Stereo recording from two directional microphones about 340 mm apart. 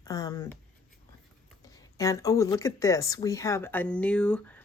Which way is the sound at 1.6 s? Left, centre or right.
Centre.